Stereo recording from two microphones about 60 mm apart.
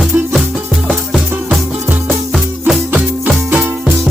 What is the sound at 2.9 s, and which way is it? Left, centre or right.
Music, right.